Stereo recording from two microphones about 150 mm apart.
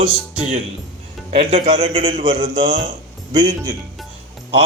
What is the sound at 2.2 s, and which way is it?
Speech, 25° right (ahead or behind).